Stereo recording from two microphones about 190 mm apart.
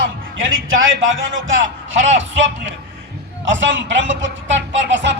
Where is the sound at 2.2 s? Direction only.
75° right (ahead or behind).